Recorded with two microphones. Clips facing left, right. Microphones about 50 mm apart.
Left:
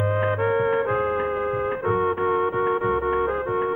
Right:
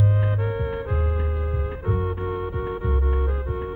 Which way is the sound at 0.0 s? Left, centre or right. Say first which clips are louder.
Left 4 dB; left.